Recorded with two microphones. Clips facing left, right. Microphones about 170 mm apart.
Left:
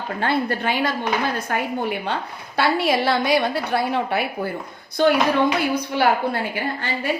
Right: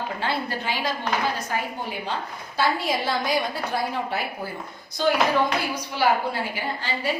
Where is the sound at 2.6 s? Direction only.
70° left (ahead or behind).